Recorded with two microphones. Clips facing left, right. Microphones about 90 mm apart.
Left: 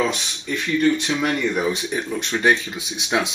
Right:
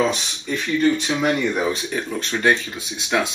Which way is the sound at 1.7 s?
15° left (ahead or behind).